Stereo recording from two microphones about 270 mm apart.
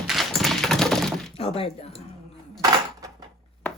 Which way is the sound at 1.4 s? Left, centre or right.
Left.